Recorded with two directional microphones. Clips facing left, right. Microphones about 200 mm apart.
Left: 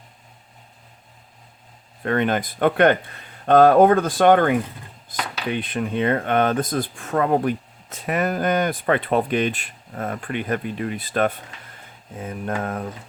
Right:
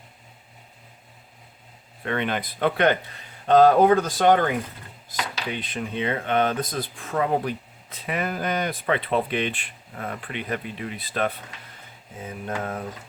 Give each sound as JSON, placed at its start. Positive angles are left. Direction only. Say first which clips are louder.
{"t": 2.0, "sound": "speech", "louder": "left 5 dB", "side_deg": 45}